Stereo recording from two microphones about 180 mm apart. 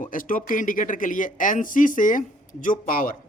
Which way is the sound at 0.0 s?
50° left (ahead or behind).